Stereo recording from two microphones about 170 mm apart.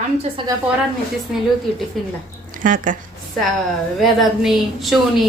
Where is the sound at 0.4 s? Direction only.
30° right (ahead or behind).